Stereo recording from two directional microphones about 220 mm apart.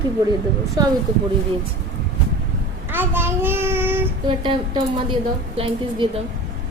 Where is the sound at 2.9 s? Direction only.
10° right (ahead or behind).